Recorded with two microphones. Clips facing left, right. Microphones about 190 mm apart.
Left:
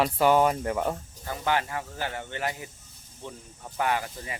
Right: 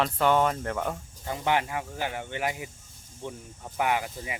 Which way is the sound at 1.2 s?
20° right (ahead or behind).